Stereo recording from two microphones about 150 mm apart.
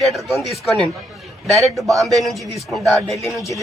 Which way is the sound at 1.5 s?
Centre (ahead or behind).